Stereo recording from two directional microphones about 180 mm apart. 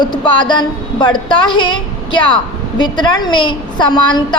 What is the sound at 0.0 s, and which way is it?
A woman's voice, 25° left (ahead or behind).